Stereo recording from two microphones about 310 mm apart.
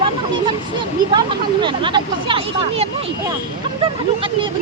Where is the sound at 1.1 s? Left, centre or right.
Centre.